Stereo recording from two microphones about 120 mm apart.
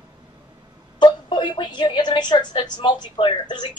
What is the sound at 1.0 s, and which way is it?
A woman's voice, 40° left (ahead or behind).